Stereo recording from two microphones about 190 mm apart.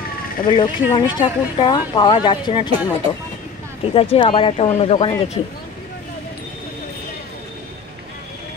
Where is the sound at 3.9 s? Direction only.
30° left (ahead or behind).